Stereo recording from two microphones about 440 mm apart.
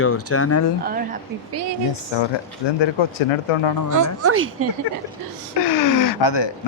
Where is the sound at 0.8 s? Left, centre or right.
Centre.